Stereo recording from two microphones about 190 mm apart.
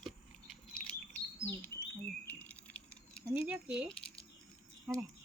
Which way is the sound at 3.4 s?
5° right (ahead or behind).